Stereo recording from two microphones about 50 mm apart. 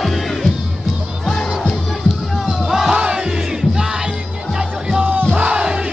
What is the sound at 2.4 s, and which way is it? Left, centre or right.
Music, centre.